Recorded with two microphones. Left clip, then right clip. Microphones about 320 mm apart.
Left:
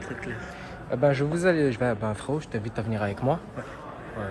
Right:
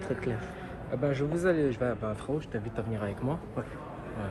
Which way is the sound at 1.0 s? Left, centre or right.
Left.